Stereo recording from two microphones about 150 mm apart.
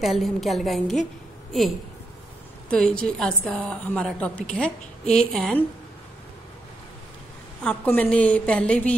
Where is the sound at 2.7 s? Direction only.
5° left (ahead or behind).